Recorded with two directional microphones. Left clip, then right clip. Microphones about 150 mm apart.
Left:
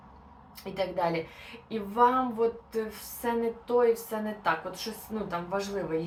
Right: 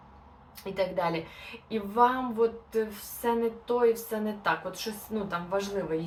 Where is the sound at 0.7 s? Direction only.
20° right (ahead or behind).